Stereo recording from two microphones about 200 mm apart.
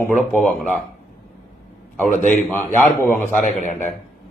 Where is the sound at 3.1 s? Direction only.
40° left (ahead or behind).